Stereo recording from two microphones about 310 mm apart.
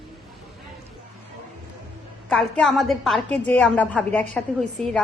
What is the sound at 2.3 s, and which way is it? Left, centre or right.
A woman's voice, centre.